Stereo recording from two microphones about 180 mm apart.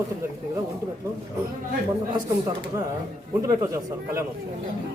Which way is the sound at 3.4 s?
15° right (ahead or behind).